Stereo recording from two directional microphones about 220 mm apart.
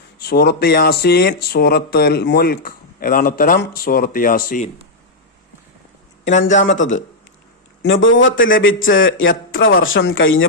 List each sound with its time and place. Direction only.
0.2 s speech: 45° left (ahead or behind)
6.2 s speech: 35° left (ahead or behind)
7.8 s speech: 60° left (ahead or behind)